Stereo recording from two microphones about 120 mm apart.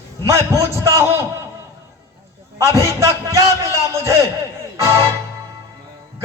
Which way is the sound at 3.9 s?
25° right (ahead or behind).